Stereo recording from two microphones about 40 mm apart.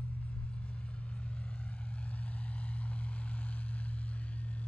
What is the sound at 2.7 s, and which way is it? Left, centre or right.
Vehicle, left.